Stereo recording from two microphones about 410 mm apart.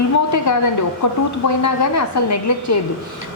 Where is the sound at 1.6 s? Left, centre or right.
Left.